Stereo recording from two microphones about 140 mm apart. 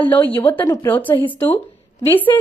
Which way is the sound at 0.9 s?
10° left (ahead or behind).